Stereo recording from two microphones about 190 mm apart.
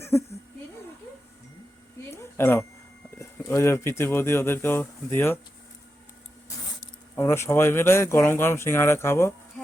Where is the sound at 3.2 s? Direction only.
15° left (ahead or behind).